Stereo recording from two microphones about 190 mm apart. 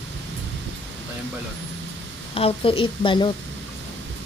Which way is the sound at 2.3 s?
30° left (ahead or behind).